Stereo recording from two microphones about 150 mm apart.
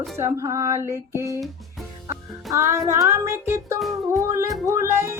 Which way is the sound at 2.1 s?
15° right (ahead or behind).